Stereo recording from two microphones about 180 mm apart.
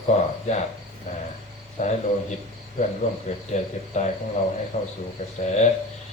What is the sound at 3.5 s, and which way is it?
Speech, 40° left (ahead or behind).